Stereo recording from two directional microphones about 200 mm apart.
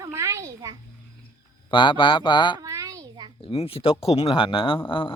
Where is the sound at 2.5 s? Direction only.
15° right (ahead or behind).